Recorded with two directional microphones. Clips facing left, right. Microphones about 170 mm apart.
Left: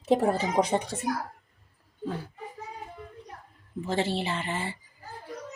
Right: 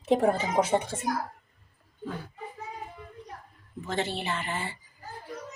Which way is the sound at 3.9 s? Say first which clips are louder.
Left 2 dB; 30° left (ahead or behind).